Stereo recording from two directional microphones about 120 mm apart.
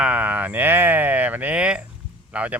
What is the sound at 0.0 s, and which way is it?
Speech, 15° right (ahead or behind).